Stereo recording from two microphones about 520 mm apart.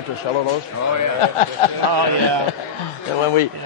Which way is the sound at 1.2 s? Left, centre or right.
Left.